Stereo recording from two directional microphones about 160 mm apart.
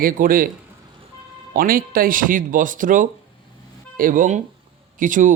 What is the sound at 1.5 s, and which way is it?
Speech, 60° right (ahead or behind).